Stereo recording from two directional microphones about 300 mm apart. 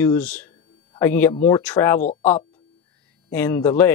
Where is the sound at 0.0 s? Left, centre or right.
Centre.